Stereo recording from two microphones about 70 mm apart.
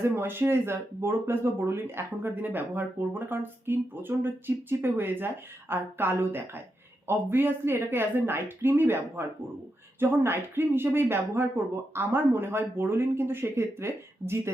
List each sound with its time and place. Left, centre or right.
0.0 s speech: right